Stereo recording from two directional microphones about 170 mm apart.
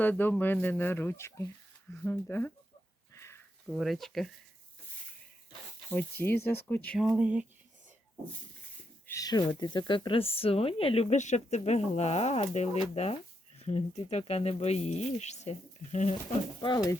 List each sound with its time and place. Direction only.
0.0 s speech: 10° left (ahead or behind)
3.2 s sniff: 15° left (ahead or behind)
3.7 s speech: centre (ahead or behind)
5.9 s speech: 10° left (ahead or behind)
6.4 s speech: 70° left (ahead or behind)
6.7 s speech: 10° left (ahead or behind)
7.2 s speech: 5° right (ahead or behind)
9.0 s speech: 20° left (ahead or behind); by 16.1 s 40° left (ahead or behind)
16.1 s speech: 25° left (ahead or behind)